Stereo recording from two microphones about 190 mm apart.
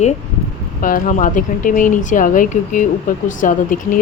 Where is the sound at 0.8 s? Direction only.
45° left (ahead or behind).